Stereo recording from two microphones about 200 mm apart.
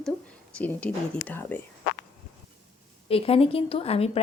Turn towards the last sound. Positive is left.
turn(degrees=30)  # may be behind; listen again after turning